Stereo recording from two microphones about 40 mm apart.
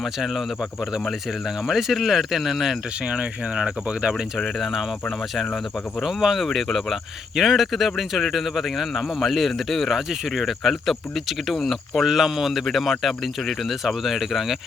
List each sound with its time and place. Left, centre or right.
0.0 s speech: centre
1.6 s speech: centre
3.1 s speech: right
4.4 s speech: centre
6.0 s speech: centre
6.4 s speech: centre
9.9 s speech: centre
13.8 s speech: centre